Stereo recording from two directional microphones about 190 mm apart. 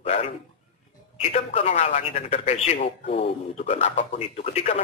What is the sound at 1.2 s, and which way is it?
A man's voice, 30° left (ahead or behind).